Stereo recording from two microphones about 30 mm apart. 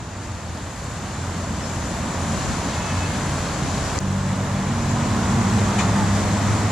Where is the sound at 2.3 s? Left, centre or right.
Centre.